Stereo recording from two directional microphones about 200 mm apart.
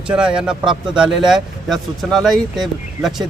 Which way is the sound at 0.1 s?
5° right (ahead or behind).